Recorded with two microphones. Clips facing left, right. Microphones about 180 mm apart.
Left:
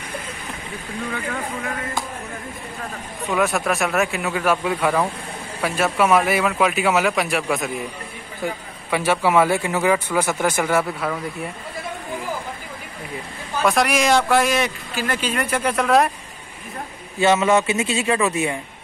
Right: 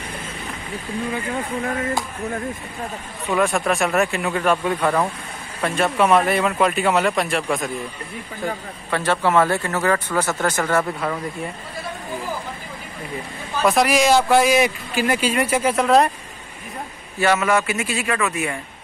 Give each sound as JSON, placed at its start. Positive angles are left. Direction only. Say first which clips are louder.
{"t": 3.3, "sound": "a man's voice", "louder": "right 1 dB", "side_deg": 0}
{"t": 8.9, "sound": "speech", "louder": "left 1 dB", "side_deg": 10}
{"t": 13.7, "sound": "speech", "louder": "right 2 dB", "side_deg": 0}
{"t": 17.2, "sound": "a man's voice", "louder": "left 2 dB", "side_deg": 20}